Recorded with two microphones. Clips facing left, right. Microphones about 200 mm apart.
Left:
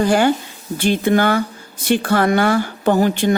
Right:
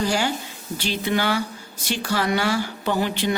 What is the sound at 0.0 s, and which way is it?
Speech, 55° left (ahead or behind).